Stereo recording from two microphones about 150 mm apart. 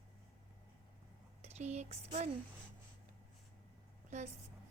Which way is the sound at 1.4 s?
50° right (ahead or behind).